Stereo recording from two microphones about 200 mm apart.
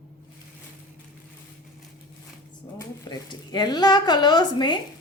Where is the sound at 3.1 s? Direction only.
20° left (ahead or behind).